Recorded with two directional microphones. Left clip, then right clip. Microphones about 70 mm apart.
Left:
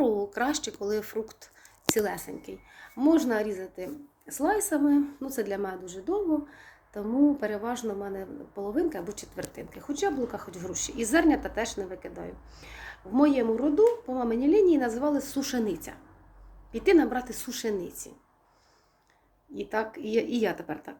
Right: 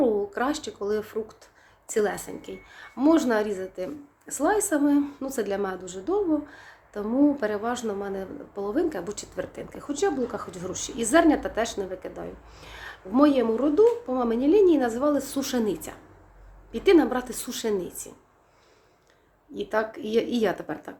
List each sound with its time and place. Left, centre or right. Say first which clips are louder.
0.0 s speech: right 2 dB; right
19.5 s speech: right 4 dB; right